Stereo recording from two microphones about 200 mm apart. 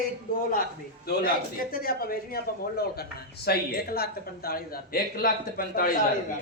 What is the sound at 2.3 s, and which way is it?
A man's voice, 50° left (ahead or behind).